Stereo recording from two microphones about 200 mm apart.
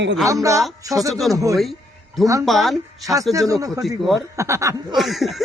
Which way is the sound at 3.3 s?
15° right (ahead or behind).